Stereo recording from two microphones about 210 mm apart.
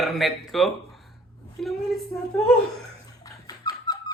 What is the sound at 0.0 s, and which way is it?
Speech, centre (ahead or behind).